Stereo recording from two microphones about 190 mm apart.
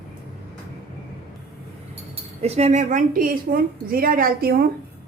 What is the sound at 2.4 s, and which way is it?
A woman's voice, 35° right (ahead or behind).